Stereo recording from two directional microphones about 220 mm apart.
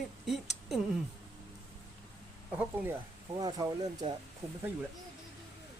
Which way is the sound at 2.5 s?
15° right (ahead or behind).